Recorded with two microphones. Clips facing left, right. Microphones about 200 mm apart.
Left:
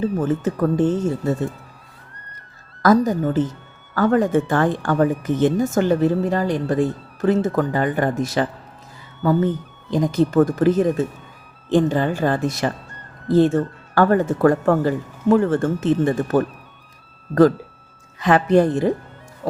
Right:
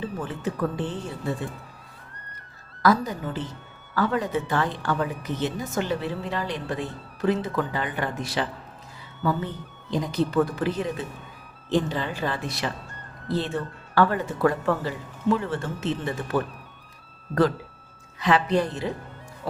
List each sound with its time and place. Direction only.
0.0 s speech: 45° left (ahead or behind)
2.8 s speech: 45° left (ahead or behind)
9.9 s speech: 45° left (ahead or behind)
18.2 s speech: 50° left (ahead or behind)